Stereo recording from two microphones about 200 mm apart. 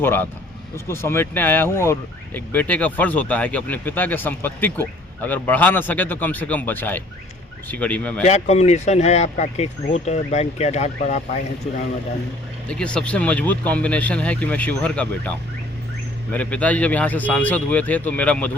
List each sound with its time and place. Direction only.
0.0 s speech: 10° left (ahead or behind)
8.2 s speech: 35° left (ahead or behind)
12.6 s speech: 5° left (ahead or behind)
16.3 s speech: 5° left (ahead or behind)